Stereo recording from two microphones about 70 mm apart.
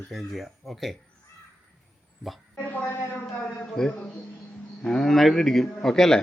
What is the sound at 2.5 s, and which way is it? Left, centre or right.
Speech, centre.